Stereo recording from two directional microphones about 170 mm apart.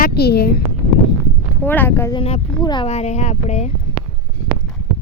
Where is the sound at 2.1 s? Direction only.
35° left (ahead or behind).